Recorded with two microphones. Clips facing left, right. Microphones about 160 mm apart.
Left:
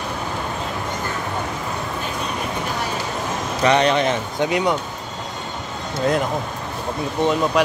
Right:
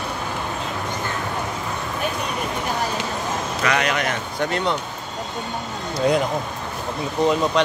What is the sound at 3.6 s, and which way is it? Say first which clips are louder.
Speech: left 6 dB; 30° left (ahead or behind).